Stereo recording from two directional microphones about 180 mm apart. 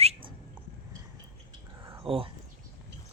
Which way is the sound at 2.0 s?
30° right (ahead or behind).